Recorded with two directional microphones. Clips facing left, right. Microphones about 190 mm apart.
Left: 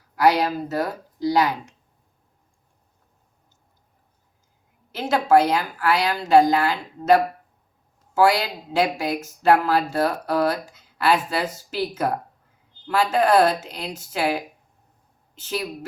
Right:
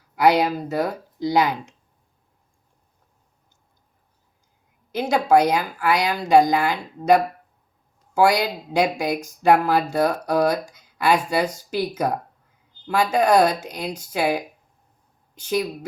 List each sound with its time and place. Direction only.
0.2 s speech: 20° right (ahead or behind)
5.0 s a woman's voice: 15° right (ahead or behind)